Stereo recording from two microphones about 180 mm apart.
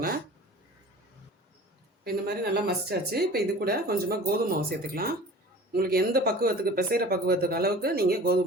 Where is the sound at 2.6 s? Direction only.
60° right (ahead or behind).